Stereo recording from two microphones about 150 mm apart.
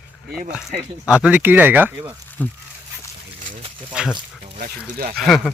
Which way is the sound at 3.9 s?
5° right (ahead or behind).